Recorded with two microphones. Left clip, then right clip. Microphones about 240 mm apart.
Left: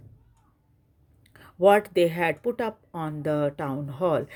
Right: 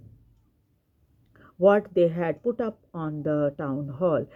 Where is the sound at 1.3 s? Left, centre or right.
Left.